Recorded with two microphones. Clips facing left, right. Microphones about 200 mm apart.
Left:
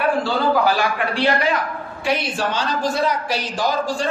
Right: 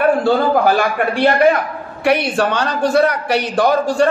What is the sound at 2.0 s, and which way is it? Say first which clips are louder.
A man's voice: right 7 dB; 65° right (ahead or behind).